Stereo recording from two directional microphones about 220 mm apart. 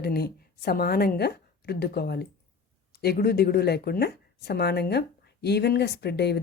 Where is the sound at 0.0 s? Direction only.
45° left (ahead or behind).